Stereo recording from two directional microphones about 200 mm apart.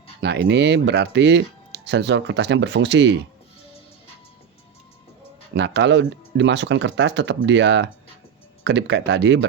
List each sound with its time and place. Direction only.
0.2 s speech: 55° right (ahead or behind)
5.5 s speech: 60° right (ahead or behind)